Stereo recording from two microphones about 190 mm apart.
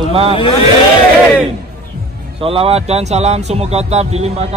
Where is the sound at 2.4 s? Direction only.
30° right (ahead or behind).